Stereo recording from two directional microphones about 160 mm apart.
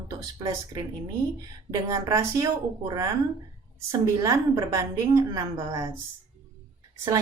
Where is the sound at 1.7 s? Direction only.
20° right (ahead or behind).